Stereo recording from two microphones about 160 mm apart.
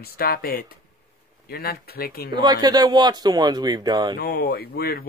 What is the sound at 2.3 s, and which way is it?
Speech, 25° right (ahead or behind).